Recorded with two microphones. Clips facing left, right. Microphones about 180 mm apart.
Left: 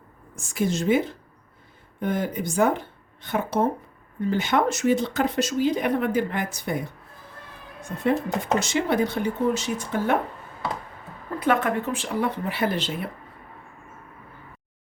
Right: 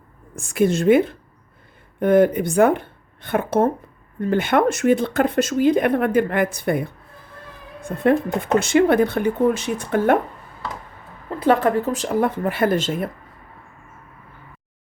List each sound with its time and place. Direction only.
0.3 s speech: 60° right (ahead or behind)
8.5 s speech: 55° right (ahead or behind)
11.3 s speech: 30° right (ahead or behind)